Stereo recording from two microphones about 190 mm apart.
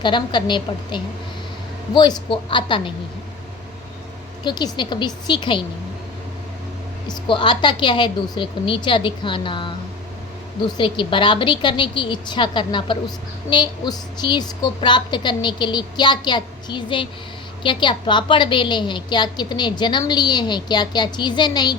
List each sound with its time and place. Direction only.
0.0 s a woman's voice: 25° left (ahead or behind)
4.4 s a woman's voice: 20° left (ahead or behind)
7.1 s a woman's voice: 25° left (ahead or behind)